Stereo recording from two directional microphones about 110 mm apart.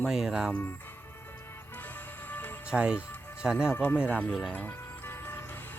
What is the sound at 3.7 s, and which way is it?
Speech, 20° left (ahead or behind).